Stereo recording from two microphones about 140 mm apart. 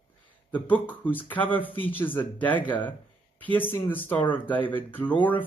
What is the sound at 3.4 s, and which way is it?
Speech, 10° left (ahead or behind).